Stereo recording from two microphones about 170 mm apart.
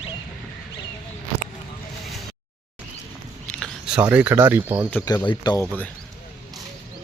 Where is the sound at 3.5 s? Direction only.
5° left (ahead or behind).